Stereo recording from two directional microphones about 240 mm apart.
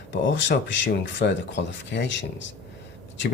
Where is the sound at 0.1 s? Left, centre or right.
Left.